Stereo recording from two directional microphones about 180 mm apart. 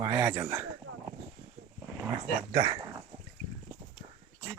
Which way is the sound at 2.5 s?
25° right (ahead or behind).